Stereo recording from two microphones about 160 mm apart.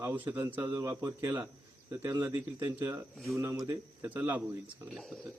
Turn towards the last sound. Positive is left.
turn(degrees=0)  # may be behind; listen again after turning